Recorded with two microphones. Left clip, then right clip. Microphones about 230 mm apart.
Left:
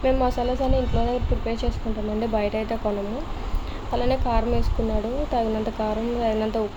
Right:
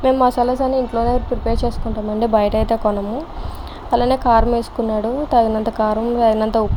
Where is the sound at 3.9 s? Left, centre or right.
Right.